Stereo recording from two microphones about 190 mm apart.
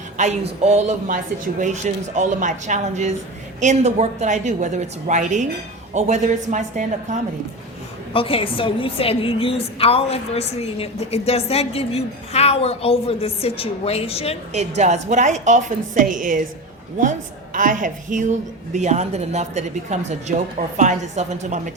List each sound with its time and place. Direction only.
0.2 s a woman's voice: 35° right (ahead or behind)
8.1 s a woman's voice: 30° left (ahead or behind)
14.5 s a woman's voice: 35° right (ahead or behind)